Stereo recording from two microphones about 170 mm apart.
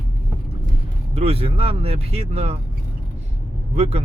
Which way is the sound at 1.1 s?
35° right (ahead or behind).